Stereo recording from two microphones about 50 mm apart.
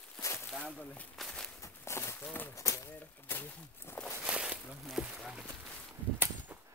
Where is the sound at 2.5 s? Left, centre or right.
Left.